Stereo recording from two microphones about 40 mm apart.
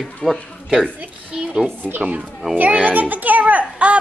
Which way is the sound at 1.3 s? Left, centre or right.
Centre.